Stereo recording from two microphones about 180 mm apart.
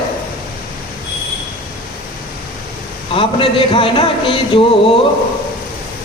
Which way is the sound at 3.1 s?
30° left (ahead or behind).